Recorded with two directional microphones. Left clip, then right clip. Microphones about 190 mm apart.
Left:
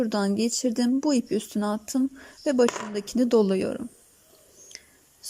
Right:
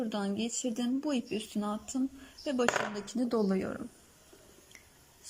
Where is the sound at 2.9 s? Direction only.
65° left (ahead or behind).